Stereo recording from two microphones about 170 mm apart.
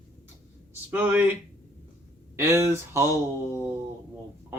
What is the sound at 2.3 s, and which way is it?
Speech, 15° right (ahead or behind).